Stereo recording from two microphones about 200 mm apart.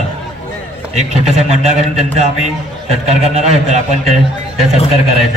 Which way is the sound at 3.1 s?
35° right (ahead or behind).